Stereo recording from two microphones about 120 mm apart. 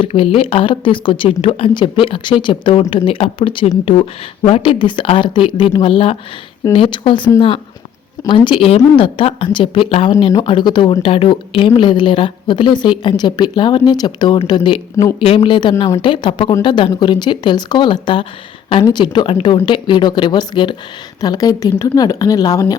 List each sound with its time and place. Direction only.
0.0 s speech: 50° left (ahead or behind)
15.2 s speech: 50° left (ahead or behind); by 22.6 s 30° left (ahead or behind)